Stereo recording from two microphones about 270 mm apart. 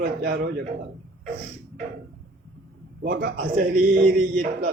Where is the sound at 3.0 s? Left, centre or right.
Right.